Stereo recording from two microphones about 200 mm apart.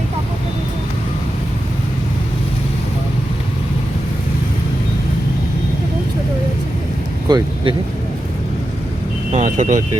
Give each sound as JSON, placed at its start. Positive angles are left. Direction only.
{"t": 7.3, "sound": "speech", "side_deg": -20}
{"t": 9.3, "sound": "speech", "side_deg": -35}